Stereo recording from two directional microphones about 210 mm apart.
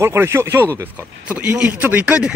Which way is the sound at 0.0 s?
10° right (ahead or behind).